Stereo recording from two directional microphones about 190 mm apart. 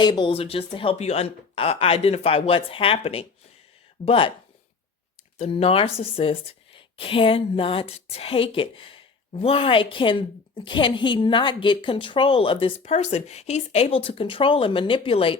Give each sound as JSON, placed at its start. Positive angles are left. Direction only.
{"t": 0.0, "sound": "a woman's voice", "side_deg": 25}
{"t": 5.4, "sound": "a woman's voice", "side_deg": 30}